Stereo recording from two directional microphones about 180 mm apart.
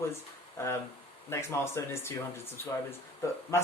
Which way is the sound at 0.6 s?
15° left (ahead or behind).